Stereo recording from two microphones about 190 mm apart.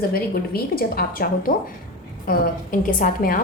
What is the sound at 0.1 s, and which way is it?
A woman's voice, 50° left (ahead or behind).